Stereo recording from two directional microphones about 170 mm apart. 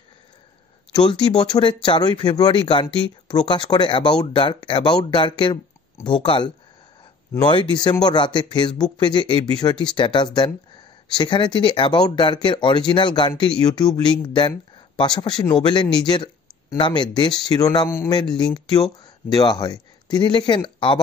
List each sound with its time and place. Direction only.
0.9 s speech: 25° left (ahead or behind)
18.2 s speech: 5° left (ahead or behind)
18.7 s speech: 20° left (ahead or behind)